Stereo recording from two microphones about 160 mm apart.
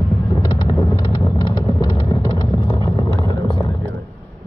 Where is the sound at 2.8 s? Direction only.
25° right (ahead or behind).